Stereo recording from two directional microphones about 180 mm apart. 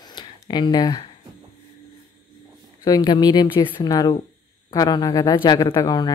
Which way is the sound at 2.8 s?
20° left (ahead or behind).